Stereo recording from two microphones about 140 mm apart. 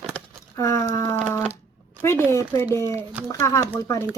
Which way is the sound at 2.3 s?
20° left (ahead or behind).